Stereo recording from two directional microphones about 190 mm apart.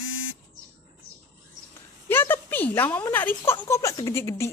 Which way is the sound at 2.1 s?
10° left (ahead or behind).